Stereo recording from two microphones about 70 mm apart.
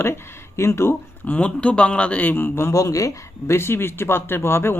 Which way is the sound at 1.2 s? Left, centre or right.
Centre.